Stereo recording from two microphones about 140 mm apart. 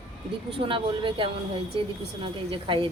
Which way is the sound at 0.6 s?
35° right (ahead or behind).